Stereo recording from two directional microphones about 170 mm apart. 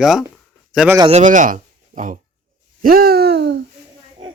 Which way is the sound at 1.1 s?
50° right (ahead or behind).